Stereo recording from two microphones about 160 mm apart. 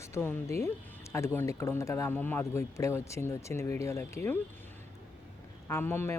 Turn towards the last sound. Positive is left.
turn(degrees=15)  # may be behind; listen again after turning